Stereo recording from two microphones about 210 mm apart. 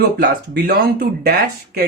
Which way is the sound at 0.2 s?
50° right (ahead or behind).